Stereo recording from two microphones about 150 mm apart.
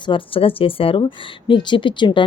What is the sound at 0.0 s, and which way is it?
A woman's voice, 35° left (ahead or behind).